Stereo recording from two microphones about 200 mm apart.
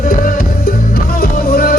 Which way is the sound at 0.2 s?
45° left (ahead or behind).